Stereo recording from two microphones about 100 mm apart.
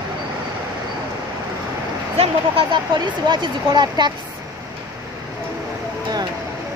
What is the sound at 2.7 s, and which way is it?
Speech, 45° right (ahead or behind).